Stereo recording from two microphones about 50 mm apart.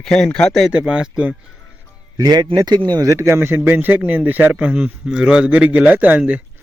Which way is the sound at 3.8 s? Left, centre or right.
Right.